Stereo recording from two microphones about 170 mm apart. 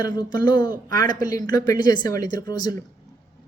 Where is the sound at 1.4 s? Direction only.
20° left (ahead or behind).